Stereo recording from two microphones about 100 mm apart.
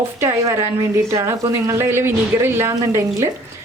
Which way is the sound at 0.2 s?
30° right (ahead or behind).